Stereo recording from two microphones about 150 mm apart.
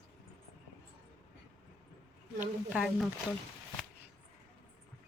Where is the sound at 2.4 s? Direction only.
5° right (ahead or behind).